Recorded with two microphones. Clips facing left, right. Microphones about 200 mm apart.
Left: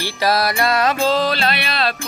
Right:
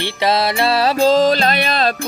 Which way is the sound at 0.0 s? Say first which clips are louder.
Right 2 dB; 25° right (ahead or behind).